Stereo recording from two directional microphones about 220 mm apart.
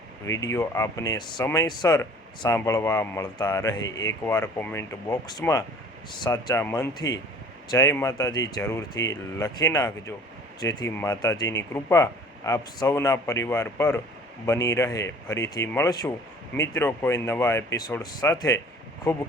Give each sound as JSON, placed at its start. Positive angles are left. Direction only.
{"t": 0.3, "sound": "speech", "side_deg": 15}